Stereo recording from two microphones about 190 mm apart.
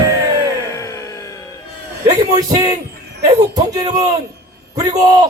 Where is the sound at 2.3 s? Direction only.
20° right (ahead or behind).